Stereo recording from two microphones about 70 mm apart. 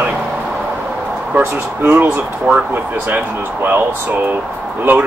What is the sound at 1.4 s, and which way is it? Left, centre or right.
Speech, right.